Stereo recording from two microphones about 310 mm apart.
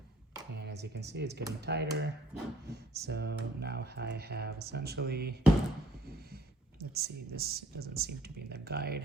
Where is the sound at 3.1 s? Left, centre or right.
Right.